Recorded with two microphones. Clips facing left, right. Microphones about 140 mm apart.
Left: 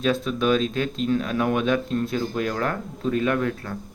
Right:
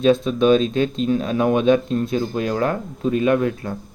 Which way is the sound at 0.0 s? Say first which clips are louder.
Right 7 dB; 25° right (ahead or behind).